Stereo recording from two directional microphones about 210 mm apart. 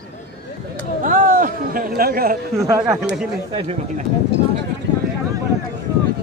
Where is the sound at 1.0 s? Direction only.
40° right (ahead or behind).